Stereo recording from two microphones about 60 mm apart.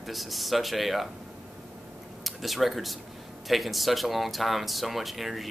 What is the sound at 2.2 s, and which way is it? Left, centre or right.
Speech, centre.